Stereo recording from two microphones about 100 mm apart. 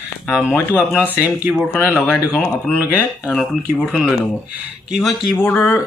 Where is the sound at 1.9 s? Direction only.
10° left (ahead or behind).